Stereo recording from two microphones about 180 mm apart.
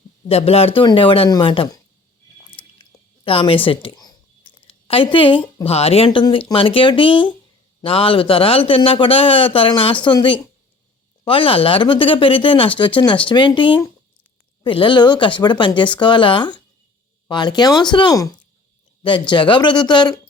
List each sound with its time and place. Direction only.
0.3 s speech: 35° left (ahead or behind)
3.2 s a man's voice: 30° left (ahead or behind)
19.3 s speech: 25° left (ahead or behind)